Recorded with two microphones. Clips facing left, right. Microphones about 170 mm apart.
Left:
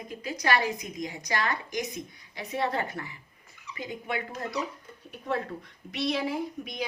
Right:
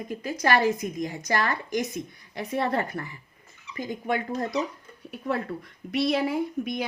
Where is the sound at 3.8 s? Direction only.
45° right (ahead or behind).